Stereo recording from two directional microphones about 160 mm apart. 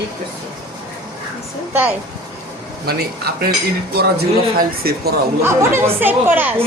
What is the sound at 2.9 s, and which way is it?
Speech, 75° right (ahead or behind).